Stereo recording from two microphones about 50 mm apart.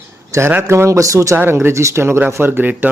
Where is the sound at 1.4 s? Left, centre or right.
Right.